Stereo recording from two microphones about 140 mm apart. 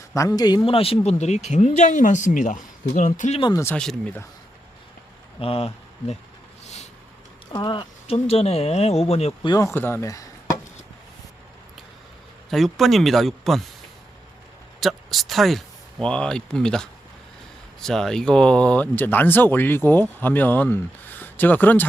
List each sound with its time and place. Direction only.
0.1 s speech: 25° left (ahead or behind); by 3.4 s 55° left (ahead or behind)
3.8 s speech: 5° left (ahead or behind)
5.4 s speech: 45° left (ahead or behind)
7.5 s speech: 35° left (ahead or behind); by 9.5 s 50° left (ahead or behind)
9.7 s speech: 15° left (ahead or behind)
12.5 s speech: centre (ahead or behind)
14.8 s speech: centre (ahead or behind)